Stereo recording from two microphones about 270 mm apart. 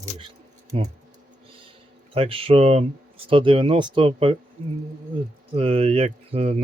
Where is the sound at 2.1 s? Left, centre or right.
Right.